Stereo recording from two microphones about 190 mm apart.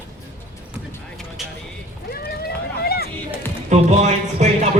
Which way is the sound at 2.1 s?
55° left (ahead or behind).